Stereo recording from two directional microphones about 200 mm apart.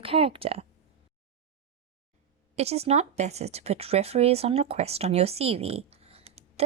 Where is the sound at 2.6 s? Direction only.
30° right (ahead or behind).